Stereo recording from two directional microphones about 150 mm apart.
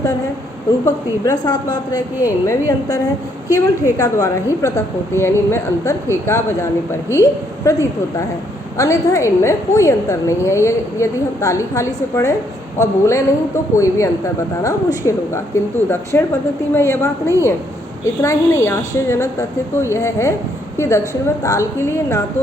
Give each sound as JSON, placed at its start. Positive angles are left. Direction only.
{"t": 0.9, "sound": "a woman's voice", "side_deg": 25}